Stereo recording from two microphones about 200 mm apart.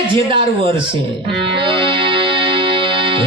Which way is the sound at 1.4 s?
25° right (ahead or behind).